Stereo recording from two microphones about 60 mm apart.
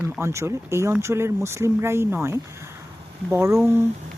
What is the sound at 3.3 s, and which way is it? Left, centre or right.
Speech, right.